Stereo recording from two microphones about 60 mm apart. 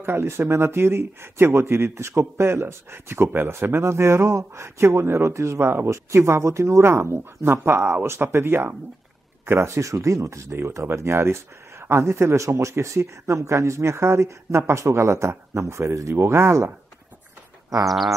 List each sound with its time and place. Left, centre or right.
0.0 s speech: right
9.8 s speech: right
17.8 s bird: centre